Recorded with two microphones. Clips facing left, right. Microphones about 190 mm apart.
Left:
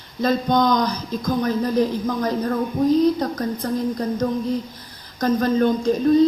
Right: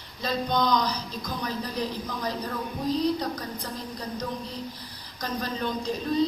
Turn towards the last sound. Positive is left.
turn(degrees=50)  # may be behind; listen again after turning